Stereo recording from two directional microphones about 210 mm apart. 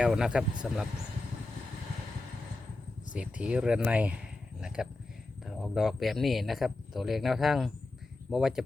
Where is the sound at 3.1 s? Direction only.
5° right (ahead or behind).